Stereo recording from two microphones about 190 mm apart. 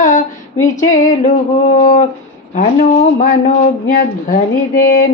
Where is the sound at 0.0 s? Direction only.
40° left (ahead or behind).